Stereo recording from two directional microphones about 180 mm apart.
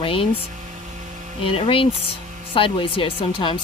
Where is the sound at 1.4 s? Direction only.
30° left (ahead or behind).